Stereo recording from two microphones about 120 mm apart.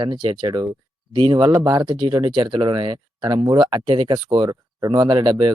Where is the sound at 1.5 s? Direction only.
30° right (ahead or behind).